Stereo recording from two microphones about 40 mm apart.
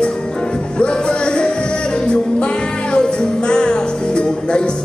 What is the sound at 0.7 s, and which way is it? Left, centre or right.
Music, left.